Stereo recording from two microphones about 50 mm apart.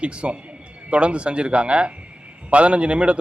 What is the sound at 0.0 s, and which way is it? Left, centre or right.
A man's voice, right.